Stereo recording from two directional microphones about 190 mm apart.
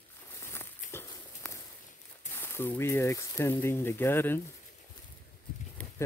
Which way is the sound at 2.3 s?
10° left (ahead or behind).